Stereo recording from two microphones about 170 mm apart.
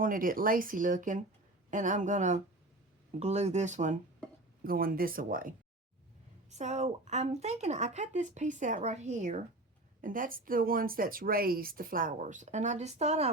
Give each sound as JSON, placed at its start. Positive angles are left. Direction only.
{"t": 0.0, "sound": "a woman's voice", "side_deg": -55}
{"t": 4.6, "sound": "speech", "side_deg": -60}
{"t": 6.5, "sound": "a woman's voice", "side_deg": -40}